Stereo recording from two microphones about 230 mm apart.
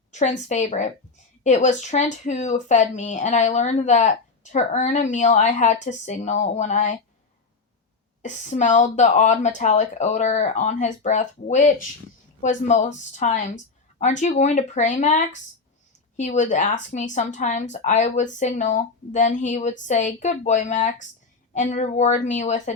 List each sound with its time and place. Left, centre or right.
0.1 s speech: left
8.2 s speech: left